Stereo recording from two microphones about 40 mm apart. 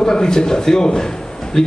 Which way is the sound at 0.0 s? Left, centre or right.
Centre.